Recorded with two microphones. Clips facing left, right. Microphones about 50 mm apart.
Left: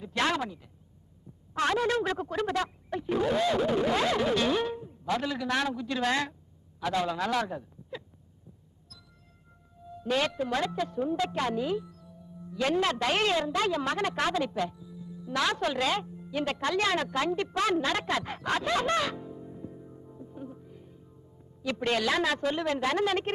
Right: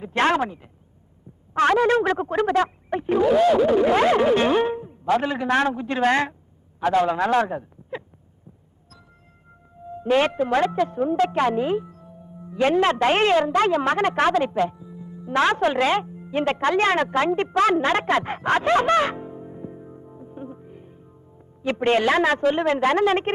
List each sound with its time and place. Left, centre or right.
0.0 s a man's voice: right
3.8 s a sound: right
5.0 s a man's voice: right
9.7 s a woman's voice: right